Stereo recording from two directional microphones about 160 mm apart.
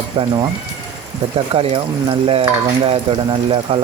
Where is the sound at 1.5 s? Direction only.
35° right (ahead or behind).